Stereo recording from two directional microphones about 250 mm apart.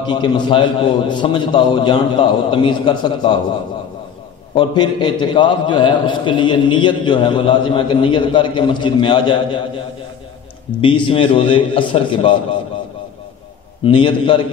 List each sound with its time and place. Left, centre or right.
0.0 s a man's voice: centre
4.6 s a man's voice: centre
10.8 s a man's voice: centre
13.8 s a man's voice: centre